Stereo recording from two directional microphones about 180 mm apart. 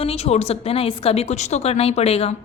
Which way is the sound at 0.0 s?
35° left (ahead or behind).